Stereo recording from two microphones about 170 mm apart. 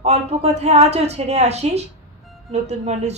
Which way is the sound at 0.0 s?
40° right (ahead or behind).